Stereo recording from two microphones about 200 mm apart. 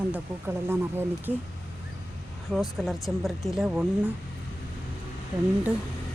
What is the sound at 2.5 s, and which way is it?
Speech, centre (ahead or behind).